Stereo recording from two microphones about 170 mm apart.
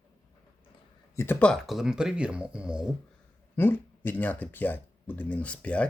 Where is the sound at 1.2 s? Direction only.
10° left (ahead or behind); by 2.9 s 5° right (ahead or behind).